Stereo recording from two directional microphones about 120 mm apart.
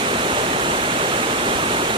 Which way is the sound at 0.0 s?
45° right (ahead or behind).